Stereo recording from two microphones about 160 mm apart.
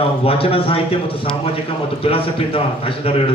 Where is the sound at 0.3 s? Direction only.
35° left (ahead or behind).